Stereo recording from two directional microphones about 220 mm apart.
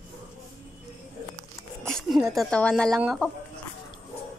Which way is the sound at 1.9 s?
Centre (ahead or behind).